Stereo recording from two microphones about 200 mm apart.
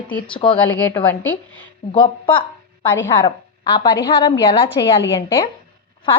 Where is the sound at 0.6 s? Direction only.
10° left (ahead or behind).